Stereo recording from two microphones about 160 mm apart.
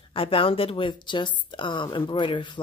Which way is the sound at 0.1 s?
35° left (ahead or behind).